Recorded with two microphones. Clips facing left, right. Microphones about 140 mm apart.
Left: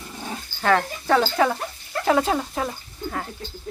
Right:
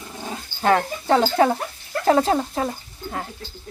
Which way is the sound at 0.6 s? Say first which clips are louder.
Right 2 dB; 25° right (ahead or behind).